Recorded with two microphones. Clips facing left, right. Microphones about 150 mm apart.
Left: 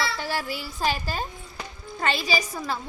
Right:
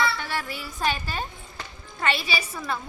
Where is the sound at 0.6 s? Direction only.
35° left (ahead or behind).